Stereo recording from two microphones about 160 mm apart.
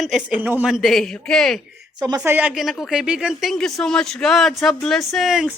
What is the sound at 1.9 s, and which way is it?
Speech, 25° right (ahead or behind).